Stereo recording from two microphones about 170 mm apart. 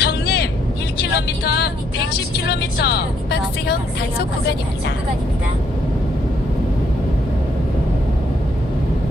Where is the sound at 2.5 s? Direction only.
70° left (ahead or behind).